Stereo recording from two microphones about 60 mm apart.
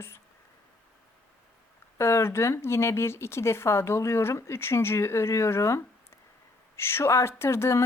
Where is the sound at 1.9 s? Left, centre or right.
Left.